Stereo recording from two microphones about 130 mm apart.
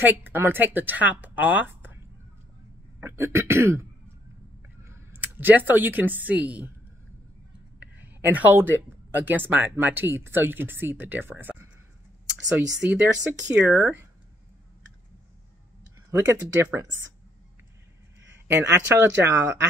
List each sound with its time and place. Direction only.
0.0 s speech: 15° right (ahead or behind)
3.0 s speech: 15° right (ahead or behind)
4.8 s speech: 15° right (ahead or behind)
7.8 s a sound: 15° right (ahead or behind)
9.2 s speech: 15° right (ahead or behind)
16.1 s speech: 15° right (ahead or behind)
18.5 s speech: 15° right (ahead or behind)